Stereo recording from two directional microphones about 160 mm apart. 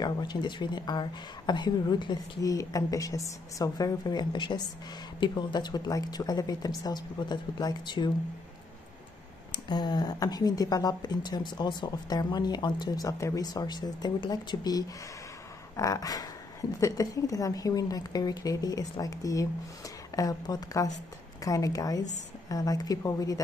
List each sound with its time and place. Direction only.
0.0 s speech: 25° left (ahead or behind)
9.5 s speech: 25° left (ahead or behind)